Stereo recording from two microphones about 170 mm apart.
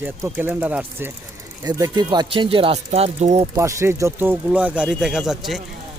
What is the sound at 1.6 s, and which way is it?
Speech, 25° right (ahead or behind).